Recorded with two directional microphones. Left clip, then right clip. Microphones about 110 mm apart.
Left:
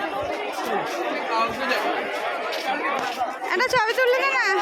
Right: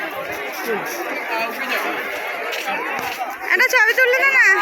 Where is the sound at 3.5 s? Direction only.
20° left (ahead or behind).